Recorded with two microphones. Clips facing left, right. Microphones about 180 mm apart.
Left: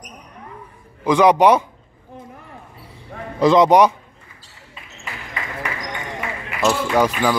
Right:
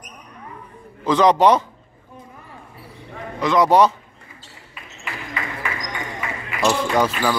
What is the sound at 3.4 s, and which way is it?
Speech, 25° left (ahead or behind).